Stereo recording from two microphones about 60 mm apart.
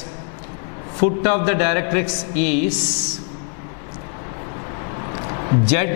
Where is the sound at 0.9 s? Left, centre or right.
Centre.